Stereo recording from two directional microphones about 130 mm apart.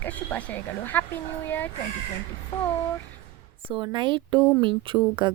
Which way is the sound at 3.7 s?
40° right (ahead or behind).